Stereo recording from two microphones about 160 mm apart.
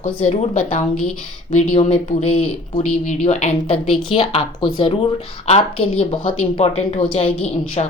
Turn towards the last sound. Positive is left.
turn(degrees=30)  # may be behind; listen again after turning